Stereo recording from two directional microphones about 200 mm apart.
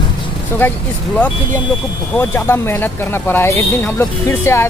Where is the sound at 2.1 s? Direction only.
10° left (ahead or behind).